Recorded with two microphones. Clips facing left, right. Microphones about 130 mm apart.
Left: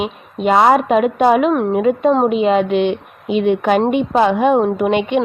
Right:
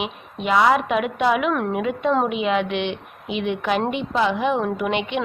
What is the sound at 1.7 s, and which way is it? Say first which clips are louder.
A woman's voice: left 7 dB; 40° left (ahead or behind).